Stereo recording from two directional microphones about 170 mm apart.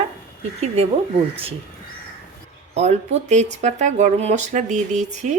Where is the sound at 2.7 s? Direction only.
40° right (ahead or behind).